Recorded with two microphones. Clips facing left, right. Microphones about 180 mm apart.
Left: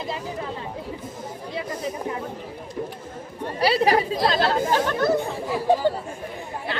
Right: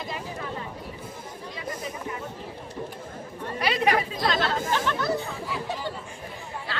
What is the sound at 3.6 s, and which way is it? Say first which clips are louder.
Speech: left 5 dB; 35° left (ahead or behind).